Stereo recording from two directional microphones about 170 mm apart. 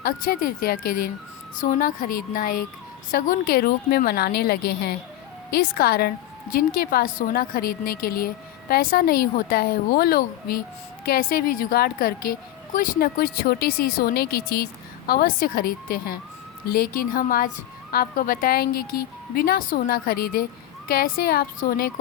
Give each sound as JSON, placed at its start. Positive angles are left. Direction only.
{"t": 0.0, "sound": "a woman's voice", "side_deg": 60}